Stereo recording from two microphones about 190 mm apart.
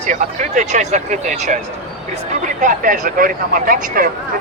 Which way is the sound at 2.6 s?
45° right (ahead or behind).